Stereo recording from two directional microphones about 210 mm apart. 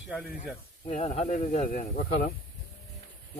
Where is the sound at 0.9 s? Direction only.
30° left (ahead or behind).